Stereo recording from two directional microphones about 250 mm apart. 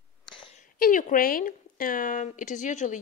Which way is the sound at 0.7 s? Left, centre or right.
Left.